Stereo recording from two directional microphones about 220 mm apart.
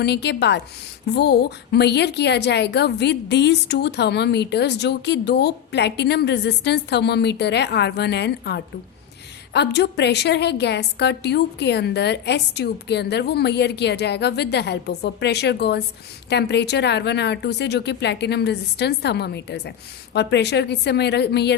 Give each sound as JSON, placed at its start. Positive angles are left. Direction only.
{"t": 0.0, "sound": "a woman's voice", "side_deg": 50}